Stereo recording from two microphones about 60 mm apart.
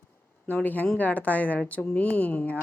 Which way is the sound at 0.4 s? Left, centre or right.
Left.